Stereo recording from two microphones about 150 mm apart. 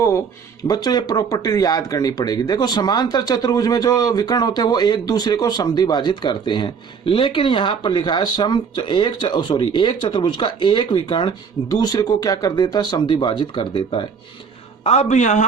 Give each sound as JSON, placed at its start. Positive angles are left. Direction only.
{"t": 0.7, "sound": "speech", "side_deg": 25}
{"t": 14.8, "sound": "a man's voice", "side_deg": 50}